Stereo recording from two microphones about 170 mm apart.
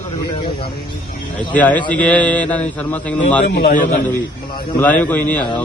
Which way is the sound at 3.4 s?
75° left (ahead or behind).